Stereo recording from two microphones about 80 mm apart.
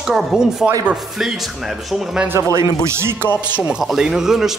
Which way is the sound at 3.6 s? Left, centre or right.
Centre.